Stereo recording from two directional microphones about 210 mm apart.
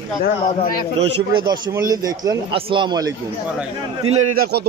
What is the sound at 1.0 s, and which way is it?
A man's voice, 20° right (ahead or behind).